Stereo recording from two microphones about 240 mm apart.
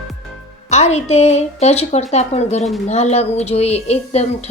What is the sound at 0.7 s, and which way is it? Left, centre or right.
A woman's voice, left.